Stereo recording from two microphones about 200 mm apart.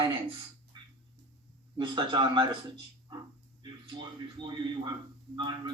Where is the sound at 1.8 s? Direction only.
25° right (ahead or behind).